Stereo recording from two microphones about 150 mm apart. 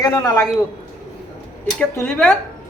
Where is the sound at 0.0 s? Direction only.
25° left (ahead or behind).